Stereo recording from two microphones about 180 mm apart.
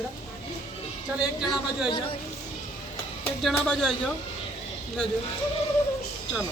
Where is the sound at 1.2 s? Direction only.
5° right (ahead or behind).